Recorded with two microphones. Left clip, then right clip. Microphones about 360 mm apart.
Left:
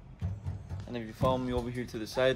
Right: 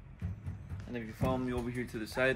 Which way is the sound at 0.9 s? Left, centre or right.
Left.